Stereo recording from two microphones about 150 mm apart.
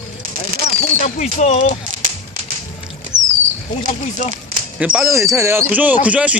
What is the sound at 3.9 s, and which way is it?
Speech, 55° left (ahead or behind).